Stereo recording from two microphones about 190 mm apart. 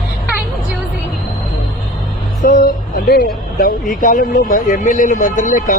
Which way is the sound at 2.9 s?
45° left (ahead or behind).